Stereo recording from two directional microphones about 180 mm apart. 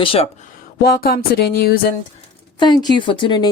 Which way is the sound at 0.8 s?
55° left (ahead or behind).